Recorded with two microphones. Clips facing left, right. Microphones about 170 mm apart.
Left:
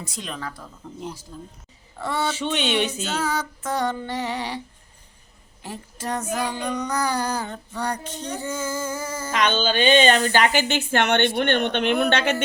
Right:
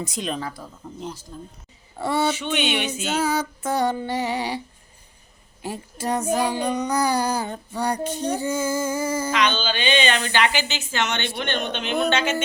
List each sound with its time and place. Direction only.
0.0 s speech: 20° right (ahead or behind)
0.8 s female singing: 5° right (ahead or behind)
5.6 s female singing: 10° right (ahead or behind)
6.2 s female singing: 30° right (ahead or behind)
6.7 s female singing: 10° right (ahead or behind)
9.3 s speech: 50° left (ahead or behind)